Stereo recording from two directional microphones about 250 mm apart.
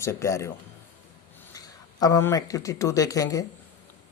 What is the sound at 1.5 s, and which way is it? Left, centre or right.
A man's voice, centre.